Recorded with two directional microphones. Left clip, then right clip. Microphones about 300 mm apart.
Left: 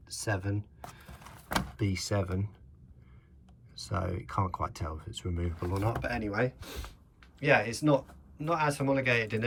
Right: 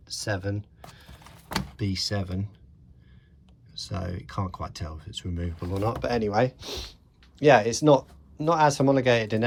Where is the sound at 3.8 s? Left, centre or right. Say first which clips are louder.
Even; centre.